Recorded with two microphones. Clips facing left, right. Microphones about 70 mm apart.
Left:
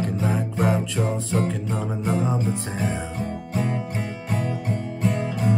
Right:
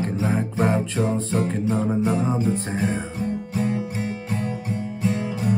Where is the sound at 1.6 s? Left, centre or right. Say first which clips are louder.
Right 5 dB; centre.